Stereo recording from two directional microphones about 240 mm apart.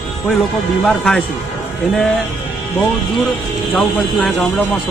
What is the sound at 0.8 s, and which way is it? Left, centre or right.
Speech, centre.